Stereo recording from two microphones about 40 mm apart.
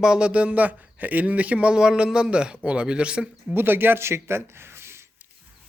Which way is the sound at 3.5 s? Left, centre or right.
Right.